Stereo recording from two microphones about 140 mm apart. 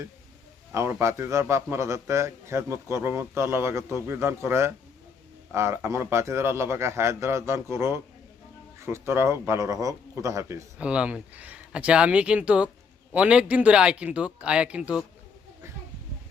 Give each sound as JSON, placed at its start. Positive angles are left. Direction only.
{"t": 0.7, "sound": "a man's voice", "side_deg": -20}
{"t": 10.8, "sound": "speech", "side_deg": -10}